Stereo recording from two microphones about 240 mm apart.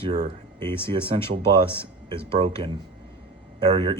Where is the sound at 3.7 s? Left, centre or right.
Centre.